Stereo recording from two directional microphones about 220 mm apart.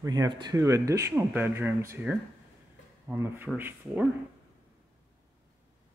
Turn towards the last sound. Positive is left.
turn(degrees=-10)  # may be behind; listen again after turning